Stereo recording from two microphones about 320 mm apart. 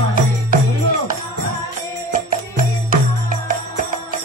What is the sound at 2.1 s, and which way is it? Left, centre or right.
Music, right.